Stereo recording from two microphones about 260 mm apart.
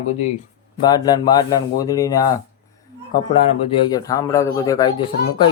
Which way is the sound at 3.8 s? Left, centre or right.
Centre.